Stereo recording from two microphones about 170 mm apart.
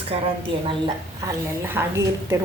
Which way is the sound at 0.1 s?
35° right (ahead or behind).